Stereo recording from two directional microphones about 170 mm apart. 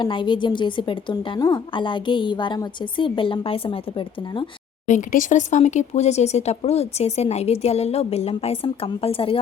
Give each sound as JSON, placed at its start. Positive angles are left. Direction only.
{"t": 0.0, "sound": "a woman's voice", "side_deg": 30}
{"t": 4.9, "sound": "speech", "side_deg": 50}